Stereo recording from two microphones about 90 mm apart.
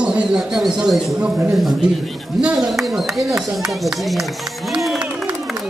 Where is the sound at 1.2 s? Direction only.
25° right (ahead or behind).